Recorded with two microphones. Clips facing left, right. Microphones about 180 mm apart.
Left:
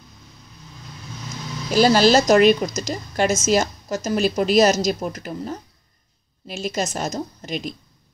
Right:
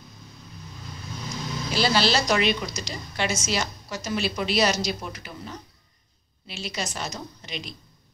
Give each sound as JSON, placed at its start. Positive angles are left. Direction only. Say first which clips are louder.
{"t": 1.7, "sound": "speech", "louder": "left 8 dB", "side_deg": 45}